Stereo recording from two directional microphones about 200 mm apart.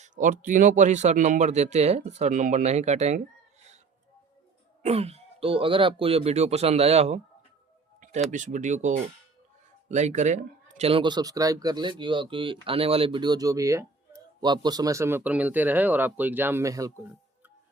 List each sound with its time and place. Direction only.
0.0 s a man's voice: 40° right (ahead or behind)
4.8 s a man's voice: 30° right (ahead or behind)
8.3 s a man's voice: 40° right (ahead or behind)
9.9 s speech: 35° right (ahead or behind); by 17.1 s 15° right (ahead or behind)